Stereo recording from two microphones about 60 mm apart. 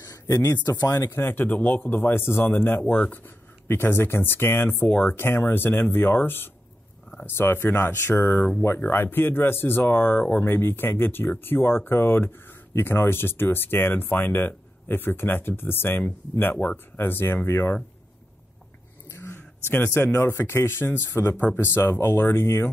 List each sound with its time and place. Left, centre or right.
0.0 s speech: left
0.7 s speech: left
1.1 s speech: left
19.1 s a sound: left
20.2 s speech: left
21.4 s speech: left